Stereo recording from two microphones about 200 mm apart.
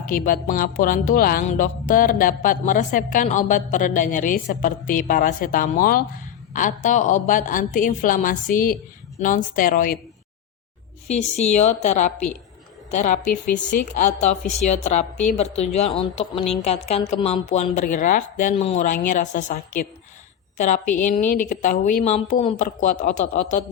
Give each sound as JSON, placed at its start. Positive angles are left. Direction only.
{"t": 0.0, "sound": "a woman's voice", "side_deg": 45}
{"t": 11.1, "sound": "a woman's voice", "side_deg": 35}